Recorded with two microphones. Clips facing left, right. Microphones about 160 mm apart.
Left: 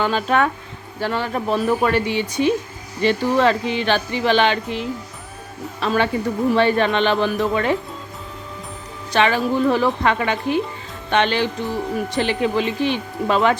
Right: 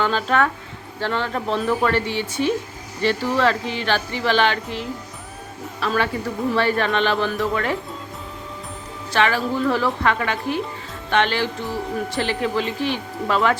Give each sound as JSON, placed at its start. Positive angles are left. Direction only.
{"t": 0.0, "sound": "a woman's voice", "side_deg": 15}
{"t": 9.1, "sound": "a woman's voice", "side_deg": 20}